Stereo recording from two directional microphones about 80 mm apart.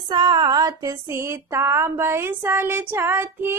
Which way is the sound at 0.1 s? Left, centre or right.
Right.